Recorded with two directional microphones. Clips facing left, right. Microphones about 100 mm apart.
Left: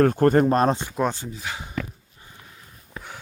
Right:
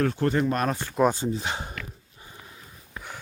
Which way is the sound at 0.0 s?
45° left (ahead or behind).